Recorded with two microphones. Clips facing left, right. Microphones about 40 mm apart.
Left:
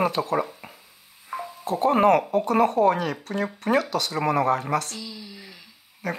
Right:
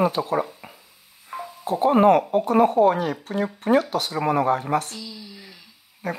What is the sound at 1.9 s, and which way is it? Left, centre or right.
Speech, left.